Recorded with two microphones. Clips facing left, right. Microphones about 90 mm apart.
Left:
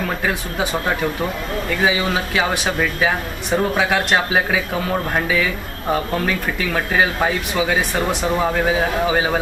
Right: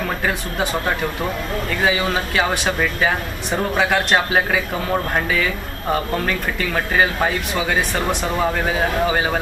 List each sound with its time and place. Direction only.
0.3 s speech: centre (ahead or behind)